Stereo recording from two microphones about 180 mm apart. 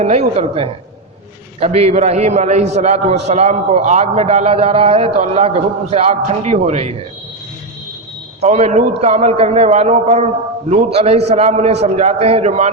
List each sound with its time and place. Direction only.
0.0 s a man's voice: 35° right (ahead or behind)
8.4 s a man's voice: 35° right (ahead or behind)